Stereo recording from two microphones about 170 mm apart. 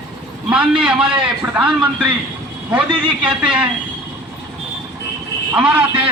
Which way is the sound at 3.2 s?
5° right (ahead or behind).